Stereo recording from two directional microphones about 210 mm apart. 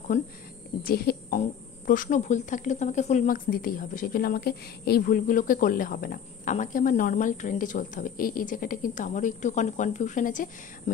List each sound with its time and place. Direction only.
0.1 s speech: 35° left (ahead or behind)
0.8 s speech: 45° left (ahead or behind)